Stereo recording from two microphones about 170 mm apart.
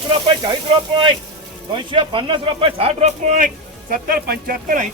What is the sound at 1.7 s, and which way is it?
Speech, 30° right (ahead or behind).